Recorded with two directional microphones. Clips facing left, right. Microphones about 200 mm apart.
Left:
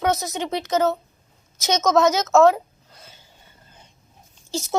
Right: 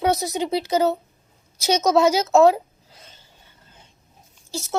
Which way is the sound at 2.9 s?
5° left (ahead or behind).